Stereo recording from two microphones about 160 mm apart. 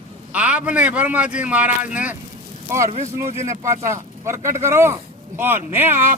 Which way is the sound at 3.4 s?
15° right (ahead or behind).